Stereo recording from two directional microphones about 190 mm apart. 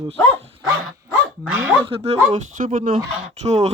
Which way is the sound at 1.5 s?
10° right (ahead or behind).